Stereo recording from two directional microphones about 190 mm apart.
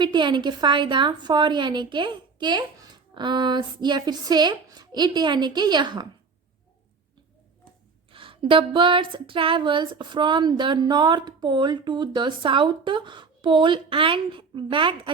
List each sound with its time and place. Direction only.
0.0 s speech: 25° right (ahead or behind)
8.1 s speech: 25° right (ahead or behind)